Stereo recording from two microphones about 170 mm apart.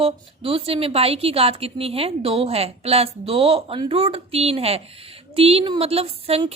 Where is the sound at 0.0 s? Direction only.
35° right (ahead or behind).